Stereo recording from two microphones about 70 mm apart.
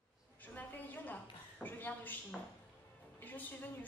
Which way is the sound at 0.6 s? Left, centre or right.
Left.